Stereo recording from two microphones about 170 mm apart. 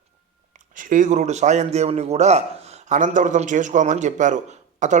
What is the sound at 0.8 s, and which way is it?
Speech, 50° right (ahead or behind).